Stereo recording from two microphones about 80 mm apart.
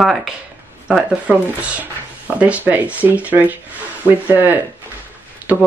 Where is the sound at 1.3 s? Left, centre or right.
Right.